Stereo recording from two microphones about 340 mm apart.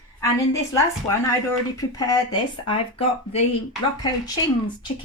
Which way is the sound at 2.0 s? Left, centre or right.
Centre.